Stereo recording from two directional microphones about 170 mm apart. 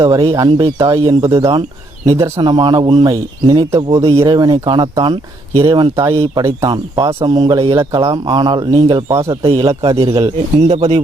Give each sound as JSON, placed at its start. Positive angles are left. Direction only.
{"t": 0.0, "sound": "speech", "side_deg": -20}
{"t": 9.3, "sound": "speech", "side_deg": -35}